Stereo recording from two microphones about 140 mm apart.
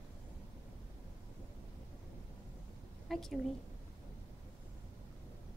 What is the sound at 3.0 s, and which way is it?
Speech, centre (ahead or behind).